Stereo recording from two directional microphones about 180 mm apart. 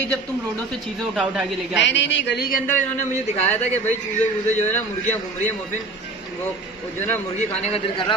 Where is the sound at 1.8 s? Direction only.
85° left.